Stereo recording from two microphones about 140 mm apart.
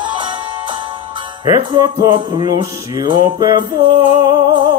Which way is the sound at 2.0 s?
30° right (ahead or behind).